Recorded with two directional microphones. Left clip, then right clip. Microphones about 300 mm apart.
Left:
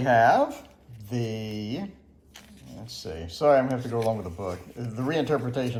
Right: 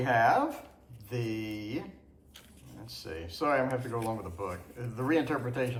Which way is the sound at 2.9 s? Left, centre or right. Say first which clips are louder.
Left 4 dB; centre.